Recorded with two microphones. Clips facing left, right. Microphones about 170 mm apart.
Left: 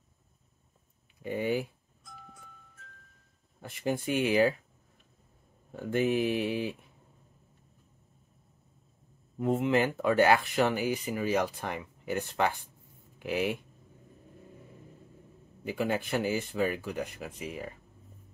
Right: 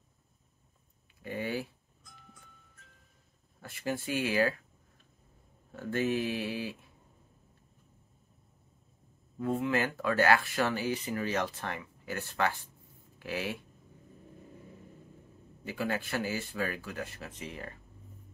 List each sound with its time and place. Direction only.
1.2 s speech: 15° left (ahead or behind)
3.6 s speech: 20° left (ahead or behind)
5.7 s speech: 15° left (ahead or behind)
9.4 s speech: 20° left (ahead or behind)
15.6 s speech: 20° left (ahead or behind)